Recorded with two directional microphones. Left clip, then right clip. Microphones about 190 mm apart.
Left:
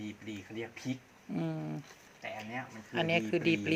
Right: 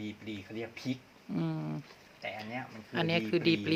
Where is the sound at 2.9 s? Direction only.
10° right (ahead or behind).